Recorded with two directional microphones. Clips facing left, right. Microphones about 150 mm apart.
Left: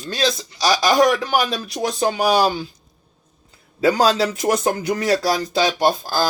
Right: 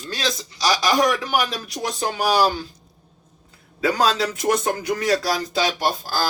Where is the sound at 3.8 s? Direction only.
30° left (ahead or behind).